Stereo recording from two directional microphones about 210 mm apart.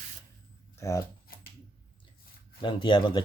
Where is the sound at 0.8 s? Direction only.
15° left (ahead or behind).